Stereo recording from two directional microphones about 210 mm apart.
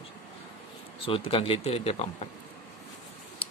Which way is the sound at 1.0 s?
25° left (ahead or behind).